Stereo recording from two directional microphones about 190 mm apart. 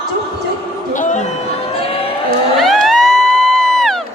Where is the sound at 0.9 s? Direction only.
40° left (ahead or behind).